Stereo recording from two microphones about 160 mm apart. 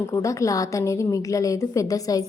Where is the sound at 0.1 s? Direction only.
20° left (ahead or behind).